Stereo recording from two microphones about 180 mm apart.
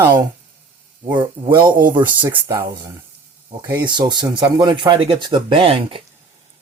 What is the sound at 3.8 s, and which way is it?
Speech, 25° right (ahead or behind).